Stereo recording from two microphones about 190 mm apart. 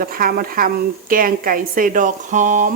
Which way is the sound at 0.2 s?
50° right (ahead or behind).